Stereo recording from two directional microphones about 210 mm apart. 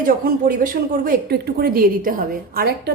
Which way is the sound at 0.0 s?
40° right (ahead or behind).